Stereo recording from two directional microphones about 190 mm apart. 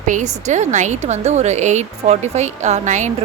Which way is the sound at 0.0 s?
40° right (ahead or behind).